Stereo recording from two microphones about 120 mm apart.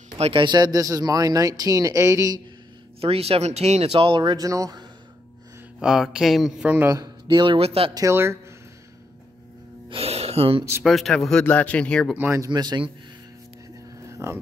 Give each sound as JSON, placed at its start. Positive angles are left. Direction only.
{"t": 0.2, "sound": "speech", "side_deg": -45}
{"t": 3.0, "sound": "speech", "side_deg": -55}
{"t": 5.8, "sound": "speech", "side_deg": -5}
{"t": 7.2, "sound": "speech", "side_deg": -40}
{"t": 7.9, "sound": "speech", "side_deg": -25}
{"t": 9.8, "sound": "music", "side_deg": -55}
{"t": 10.8, "sound": "speech", "side_deg": 0}
{"t": 12.4, "sound": "a man's voice", "side_deg": -35}
{"t": 14.0, "sound": "vehicle", "side_deg": -25}